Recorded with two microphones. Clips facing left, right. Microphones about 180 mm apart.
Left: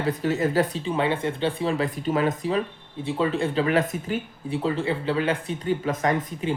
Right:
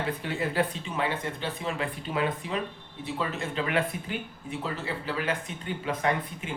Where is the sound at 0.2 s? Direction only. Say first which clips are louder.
Left 8 dB; 40° left (ahead or behind).